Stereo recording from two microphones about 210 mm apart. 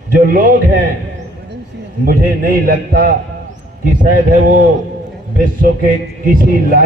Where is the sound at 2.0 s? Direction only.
45° right (ahead or behind).